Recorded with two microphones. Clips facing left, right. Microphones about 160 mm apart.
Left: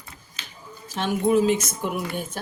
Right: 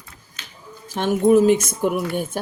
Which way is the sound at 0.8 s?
50° right (ahead or behind).